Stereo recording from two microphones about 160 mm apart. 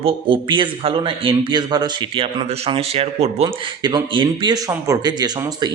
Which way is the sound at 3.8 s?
30° right (ahead or behind).